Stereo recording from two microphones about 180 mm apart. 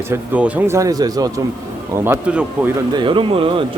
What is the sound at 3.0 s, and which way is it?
Speech, 30° right (ahead or behind).